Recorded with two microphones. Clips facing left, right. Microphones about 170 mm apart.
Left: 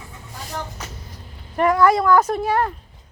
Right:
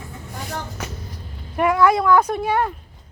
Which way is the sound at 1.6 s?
Centre (ahead or behind).